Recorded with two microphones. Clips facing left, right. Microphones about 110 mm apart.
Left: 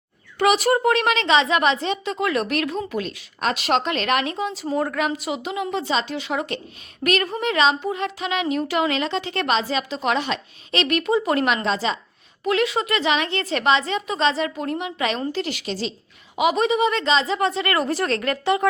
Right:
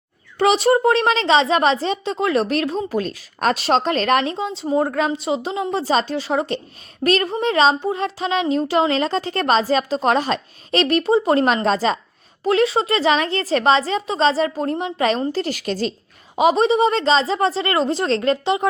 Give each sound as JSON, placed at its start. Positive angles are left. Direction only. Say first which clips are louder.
{"t": 0.3, "sound": "a woman's voice", "louder": "right 3 dB", "side_deg": -25}
{"t": 16.3, "sound": "a woman's voice", "louder": "right 4 dB", "side_deg": -35}